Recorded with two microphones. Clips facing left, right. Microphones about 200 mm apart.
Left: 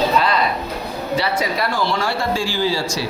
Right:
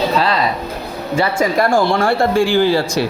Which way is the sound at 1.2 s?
50° right (ahead or behind).